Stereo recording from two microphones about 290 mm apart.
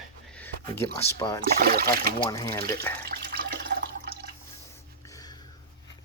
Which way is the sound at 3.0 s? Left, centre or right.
Right.